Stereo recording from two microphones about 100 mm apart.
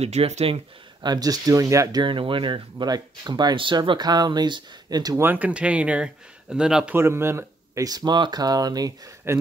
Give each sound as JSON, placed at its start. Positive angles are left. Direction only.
{"t": 0.0, "sound": "speech", "side_deg": -90}
{"t": 1.0, "sound": "speech", "side_deg": -40}
{"t": 2.0, "sound": "speech", "side_deg": -55}
{"t": 5.2, "sound": "speech", "side_deg": -15}
{"t": 7.0, "sound": "speech", "side_deg": -25}
{"t": 9.3, "sound": "speech", "side_deg": -25}